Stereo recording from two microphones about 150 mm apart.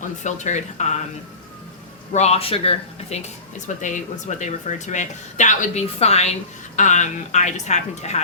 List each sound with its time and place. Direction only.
0.2 s speech: 50° left (ahead or behind)
2.1 s speech: 45° left (ahead or behind)
3.8 s speech: 55° left (ahead or behind)